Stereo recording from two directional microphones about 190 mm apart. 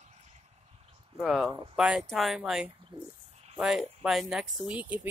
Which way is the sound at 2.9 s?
25° right (ahead or behind).